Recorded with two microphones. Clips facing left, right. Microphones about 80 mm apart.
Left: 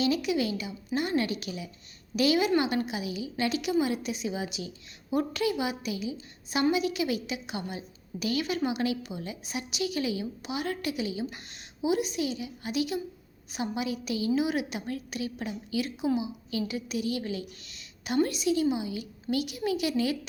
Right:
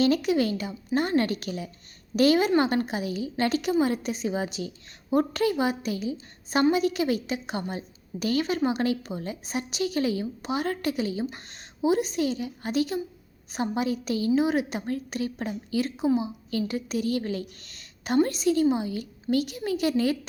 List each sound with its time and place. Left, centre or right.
0.0 s a woman's voice: right